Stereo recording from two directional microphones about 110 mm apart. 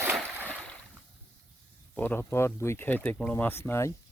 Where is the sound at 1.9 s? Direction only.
15° left (ahead or behind).